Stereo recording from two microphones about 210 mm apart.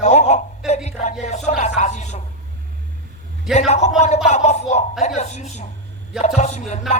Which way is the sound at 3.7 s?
30° left (ahead or behind).